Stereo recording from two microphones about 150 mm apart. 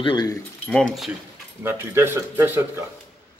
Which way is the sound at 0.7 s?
5° left (ahead or behind).